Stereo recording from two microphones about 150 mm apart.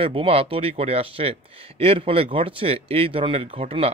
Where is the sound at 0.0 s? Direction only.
40° right (ahead or behind).